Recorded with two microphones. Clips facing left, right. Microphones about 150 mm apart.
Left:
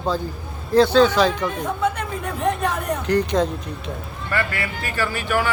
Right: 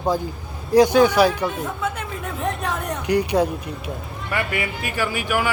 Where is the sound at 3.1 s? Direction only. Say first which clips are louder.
Right 1 dB; 10° right (ahead or behind).